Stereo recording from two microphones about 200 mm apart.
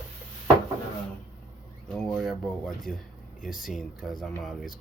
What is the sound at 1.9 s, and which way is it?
Speech, centre (ahead or behind).